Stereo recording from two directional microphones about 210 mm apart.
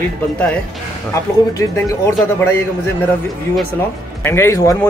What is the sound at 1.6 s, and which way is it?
Speech, 15° left (ahead or behind).